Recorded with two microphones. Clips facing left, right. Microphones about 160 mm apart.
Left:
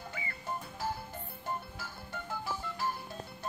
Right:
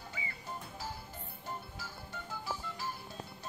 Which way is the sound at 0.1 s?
60° left (ahead or behind).